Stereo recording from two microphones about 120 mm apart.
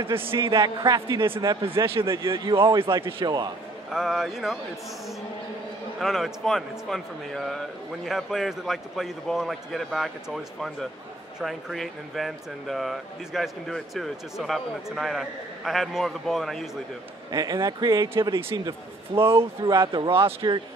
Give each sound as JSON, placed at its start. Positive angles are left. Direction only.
{"t": 0.5, "sound": "speech", "side_deg": -35}
{"t": 1.8, "sound": "speech", "side_deg": -25}
{"t": 2.5, "sound": "speech", "side_deg": -45}
{"t": 3.9, "sound": "speech", "side_deg": 0}
{"t": 5.9, "sound": "speech", "side_deg": 0}
{"t": 17.3, "sound": "speech", "side_deg": -30}
{"t": 19.1, "sound": "speech", "side_deg": -20}
{"t": 19.6, "sound": "speech", "side_deg": -40}